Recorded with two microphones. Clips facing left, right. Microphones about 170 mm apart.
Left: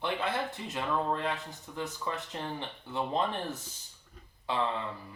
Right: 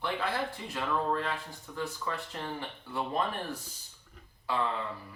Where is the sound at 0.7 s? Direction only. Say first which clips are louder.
Even; 20° left (ahead or behind).